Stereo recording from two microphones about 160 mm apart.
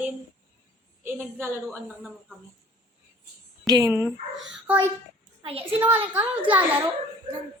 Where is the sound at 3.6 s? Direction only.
25° right (ahead or behind).